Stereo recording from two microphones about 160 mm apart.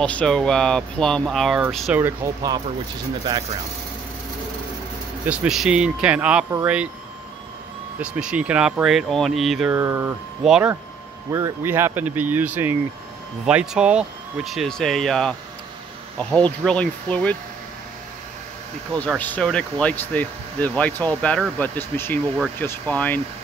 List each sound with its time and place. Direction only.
0.0 s speech: 5° left (ahead or behind)
2.0 s speech: 15° right (ahead or behind)
5.2 s speech: 10° right (ahead or behind)
8.0 s speech: 5° right (ahead or behind)
9.8 s speech: 15° right (ahead or behind)
10.4 s speech: 5° right (ahead or behind)
11.3 s speech: 15° right (ahead or behind); by 17.4 s 10° left (ahead or behind)
18.9 s speech: 10° left (ahead or behind)